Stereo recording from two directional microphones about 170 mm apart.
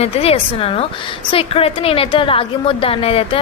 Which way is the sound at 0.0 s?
35° left (ahead or behind).